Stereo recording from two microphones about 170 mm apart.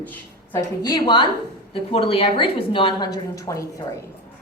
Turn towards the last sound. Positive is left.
turn(degrees=20)  # may be behind; listen again after turning